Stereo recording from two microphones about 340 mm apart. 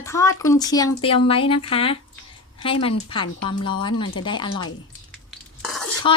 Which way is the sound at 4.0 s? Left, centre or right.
Left.